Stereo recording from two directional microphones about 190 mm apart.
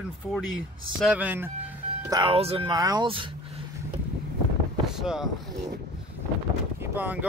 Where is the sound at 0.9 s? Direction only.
5° right (ahead or behind).